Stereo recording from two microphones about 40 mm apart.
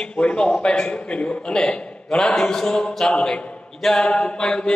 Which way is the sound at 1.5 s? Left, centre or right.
Centre.